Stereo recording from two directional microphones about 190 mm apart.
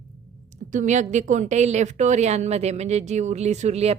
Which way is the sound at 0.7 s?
40° right (ahead or behind).